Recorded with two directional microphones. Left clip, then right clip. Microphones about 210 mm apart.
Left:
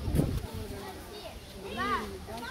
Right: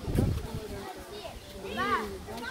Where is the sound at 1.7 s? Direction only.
40° right (ahead or behind).